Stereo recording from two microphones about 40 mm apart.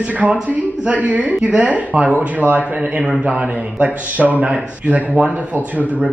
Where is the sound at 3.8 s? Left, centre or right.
Right.